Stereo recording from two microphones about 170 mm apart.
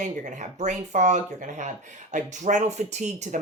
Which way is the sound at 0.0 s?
45° right (ahead or behind).